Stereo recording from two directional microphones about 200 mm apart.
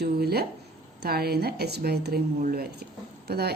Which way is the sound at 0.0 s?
50° right (ahead or behind).